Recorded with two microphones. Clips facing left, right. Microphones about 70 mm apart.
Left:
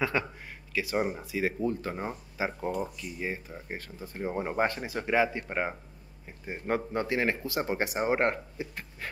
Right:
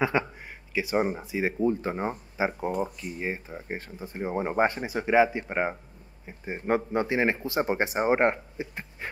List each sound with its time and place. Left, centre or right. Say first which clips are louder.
0.0 s speech: right 4 dB; right